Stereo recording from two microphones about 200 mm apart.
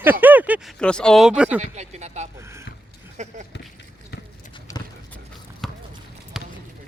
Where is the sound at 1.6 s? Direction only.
35° right (ahead or behind).